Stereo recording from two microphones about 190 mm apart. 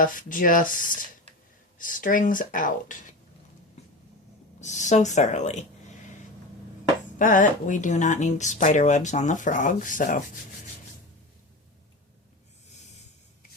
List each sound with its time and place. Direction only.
0.0 s speech: 45° left (ahead or behind)
4.6 s speech: 40° left (ahead or behind)
7.2 s speech: 45° left (ahead or behind)